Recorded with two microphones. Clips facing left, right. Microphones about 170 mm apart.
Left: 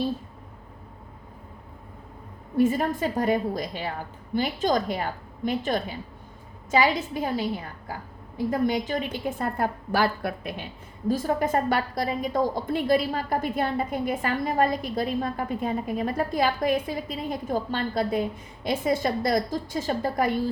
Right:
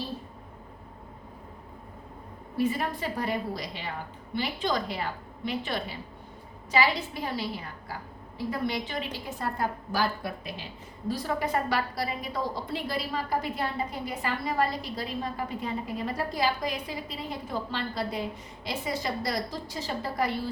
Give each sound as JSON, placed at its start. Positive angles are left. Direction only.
{"t": 2.6, "sound": "a woman's voice", "side_deg": 45}
{"t": 8.4, "sound": "a woman's voice", "side_deg": 45}
{"t": 11.1, "sound": "a woman's voice", "side_deg": 45}